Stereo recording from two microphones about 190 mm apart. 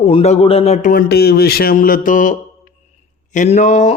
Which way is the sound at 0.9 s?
55° left (ahead or behind).